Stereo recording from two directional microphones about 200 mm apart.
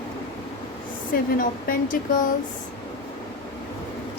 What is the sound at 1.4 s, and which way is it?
Speech, 45° left (ahead or behind).